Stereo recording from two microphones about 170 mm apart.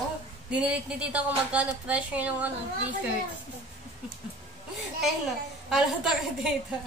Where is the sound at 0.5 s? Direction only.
5° right (ahead or behind).